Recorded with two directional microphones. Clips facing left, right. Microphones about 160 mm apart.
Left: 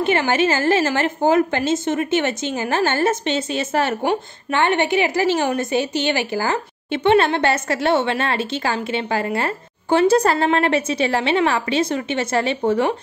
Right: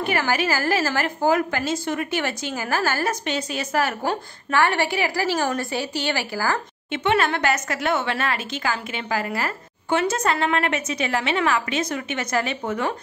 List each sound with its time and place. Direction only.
0.0 s a woman's voice: 25° left (ahead or behind)